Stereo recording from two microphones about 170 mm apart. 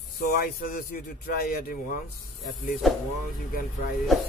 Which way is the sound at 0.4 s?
60° left (ahead or behind).